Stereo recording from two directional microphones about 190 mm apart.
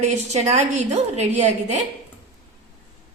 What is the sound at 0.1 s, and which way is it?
A woman's voice, 35° right (ahead or behind).